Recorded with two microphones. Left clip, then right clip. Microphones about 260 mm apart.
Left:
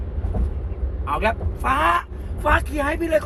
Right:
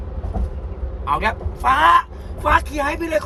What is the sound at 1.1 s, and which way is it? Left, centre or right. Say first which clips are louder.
A man's voice: right 2 dB; right.